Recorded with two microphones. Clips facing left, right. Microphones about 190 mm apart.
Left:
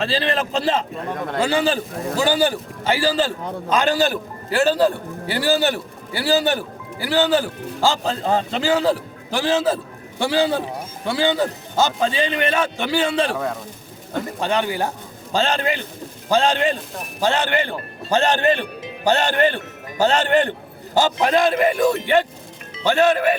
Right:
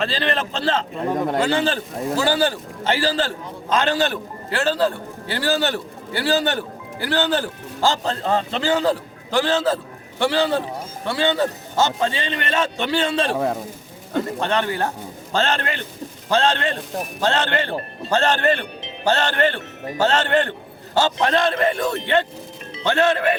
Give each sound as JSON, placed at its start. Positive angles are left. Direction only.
{"t": 0.0, "sound": "a man's voice", "side_deg": 10}
{"t": 1.0, "sound": "a man's voice", "side_deg": -10}
{"t": 1.4, "sound": "a man's voice", "side_deg": 10}
{"t": 13.3, "sound": "a man's voice", "side_deg": -30}
{"t": 14.4, "sound": "a man's voice", "side_deg": 10}